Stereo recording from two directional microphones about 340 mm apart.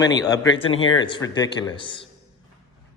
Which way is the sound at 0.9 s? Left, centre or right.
Centre.